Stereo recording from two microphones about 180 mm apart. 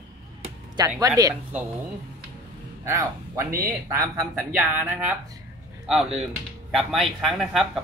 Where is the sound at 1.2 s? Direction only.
20° right (ahead or behind).